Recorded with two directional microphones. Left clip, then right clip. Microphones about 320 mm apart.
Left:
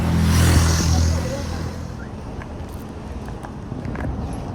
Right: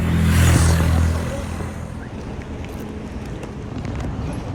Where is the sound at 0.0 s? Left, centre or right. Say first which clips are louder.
Even; left.